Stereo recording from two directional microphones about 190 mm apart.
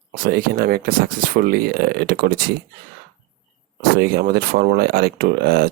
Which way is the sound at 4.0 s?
55° right (ahead or behind).